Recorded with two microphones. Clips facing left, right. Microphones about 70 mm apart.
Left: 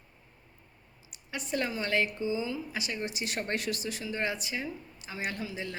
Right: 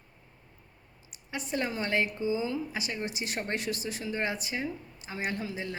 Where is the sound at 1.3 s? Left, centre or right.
Right.